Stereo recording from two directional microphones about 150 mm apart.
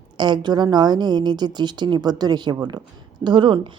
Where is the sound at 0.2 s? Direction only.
30° right (ahead or behind).